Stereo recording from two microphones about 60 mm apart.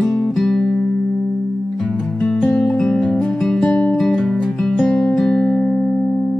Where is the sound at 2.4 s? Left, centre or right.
Centre.